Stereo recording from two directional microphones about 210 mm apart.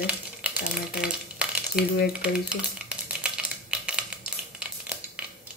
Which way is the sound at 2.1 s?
5° right (ahead or behind).